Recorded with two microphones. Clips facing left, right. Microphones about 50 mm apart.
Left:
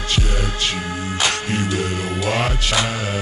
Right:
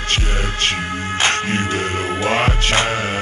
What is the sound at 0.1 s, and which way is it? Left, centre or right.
Music, right.